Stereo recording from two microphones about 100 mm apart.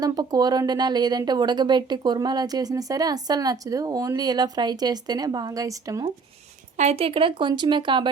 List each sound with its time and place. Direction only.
0.0 s speech: 40° right (ahead or behind)
6.8 s speech: 75° right (ahead or behind); by 8.1 s 50° right (ahead or behind)